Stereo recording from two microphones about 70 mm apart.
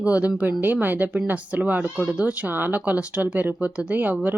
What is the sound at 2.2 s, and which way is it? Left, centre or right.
Speech, right.